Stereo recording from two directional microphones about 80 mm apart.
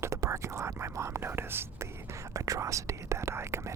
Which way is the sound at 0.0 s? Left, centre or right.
Right.